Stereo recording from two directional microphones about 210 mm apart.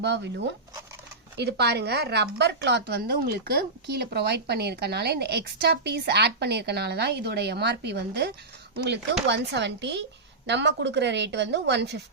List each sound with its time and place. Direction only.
0.0 s a woman's voice: 55° right (ahead or behind)
9.3 s a woman's voice: 55° right (ahead or behind)